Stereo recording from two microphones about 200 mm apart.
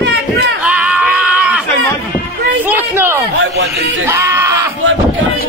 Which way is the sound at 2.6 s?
10° right (ahead or behind).